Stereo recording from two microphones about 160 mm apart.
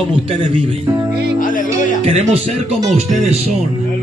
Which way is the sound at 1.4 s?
55° left (ahead or behind).